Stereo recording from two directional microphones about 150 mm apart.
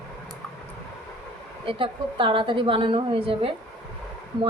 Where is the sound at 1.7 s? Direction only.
35° right (ahead or behind).